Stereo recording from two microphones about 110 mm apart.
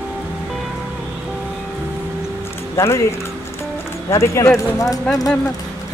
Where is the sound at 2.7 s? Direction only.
25° left (ahead or behind).